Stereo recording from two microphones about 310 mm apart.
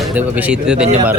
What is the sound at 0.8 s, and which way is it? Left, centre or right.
Speech, right.